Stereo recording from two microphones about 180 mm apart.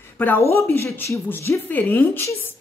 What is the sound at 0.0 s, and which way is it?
A woman's voice, 10° left (ahead or behind).